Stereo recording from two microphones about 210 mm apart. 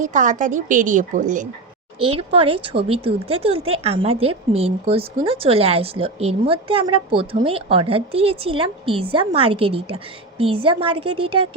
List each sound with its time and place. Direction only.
0.0 s a woman's voice: 35° right (ahead or behind)
2.0 s speech: 25° right (ahead or behind)